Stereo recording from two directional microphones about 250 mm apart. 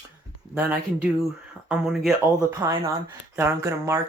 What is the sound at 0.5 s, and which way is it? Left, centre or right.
Speech, centre.